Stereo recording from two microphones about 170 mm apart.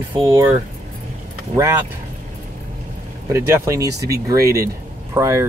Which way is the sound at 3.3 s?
15° right (ahead or behind).